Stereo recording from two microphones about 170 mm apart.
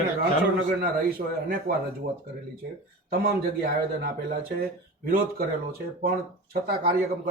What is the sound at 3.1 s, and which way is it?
Speech, 65° right (ahead or behind).